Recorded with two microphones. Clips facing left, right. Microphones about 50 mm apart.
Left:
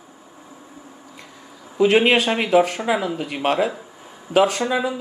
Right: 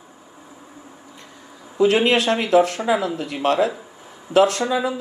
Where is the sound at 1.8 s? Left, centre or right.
Left.